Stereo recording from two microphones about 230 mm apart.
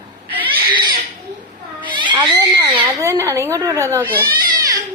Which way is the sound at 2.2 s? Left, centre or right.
Centre.